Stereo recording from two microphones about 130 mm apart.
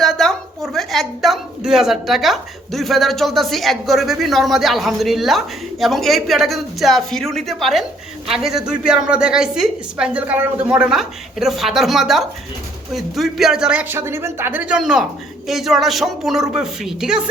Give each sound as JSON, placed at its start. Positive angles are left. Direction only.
{"t": 0.0, "sound": "a woman's voice", "side_deg": 5}
{"t": 14.0, "sound": "a woman's voice", "side_deg": -20}